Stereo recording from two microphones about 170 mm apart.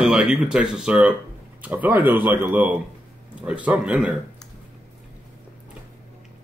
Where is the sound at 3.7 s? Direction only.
5° right (ahead or behind).